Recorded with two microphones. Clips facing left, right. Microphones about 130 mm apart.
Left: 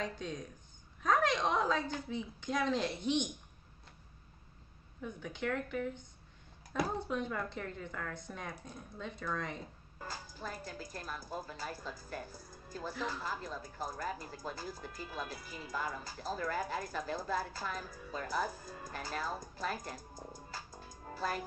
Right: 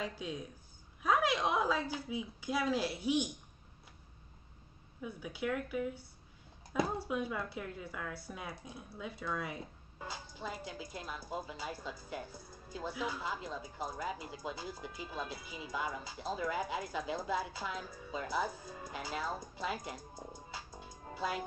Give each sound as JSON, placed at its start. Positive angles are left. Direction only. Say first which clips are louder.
{"t": 0.0, "sound": "speech", "louder": "even", "side_deg": -10}
{"t": 5.0, "sound": "speech", "louder": "even", "side_deg": -10}
{"t": 20.0, "sound": "speech", "louder": "right 1 dB", "side_deg": -25}
{"t": 21.1, "sound": "speech", "louder": "even", "side_deg": -5}